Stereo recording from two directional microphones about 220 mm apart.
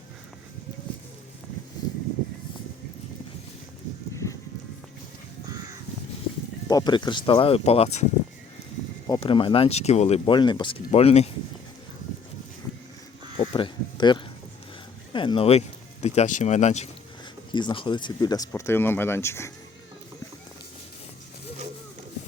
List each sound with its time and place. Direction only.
4.1 s livestock: 15° left (ahead or behind)
6.7 s speech: 20° left (ahead or behind)
9.0 s speech: 20° left (ahead or behind)
12.6 s a sound: 10° left (ahead or behind)
13.3 s a sound: 25° left (ahead or behind)
15.1 s speech: 20° left (ahead or behind)